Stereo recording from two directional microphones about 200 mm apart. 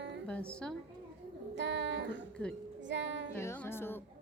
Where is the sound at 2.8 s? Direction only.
65° right (ahead or behind).